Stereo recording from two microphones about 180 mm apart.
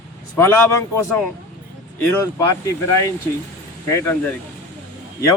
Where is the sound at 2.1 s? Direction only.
20° left (ahead or behind).